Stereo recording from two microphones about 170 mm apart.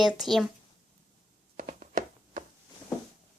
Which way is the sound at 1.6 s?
50° right (ahead or behind).